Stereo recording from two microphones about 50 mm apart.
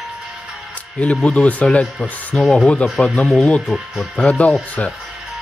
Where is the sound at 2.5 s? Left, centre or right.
Left.